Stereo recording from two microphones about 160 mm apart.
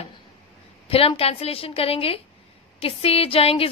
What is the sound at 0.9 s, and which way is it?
A woman's voice, 35° left (ahead or behind).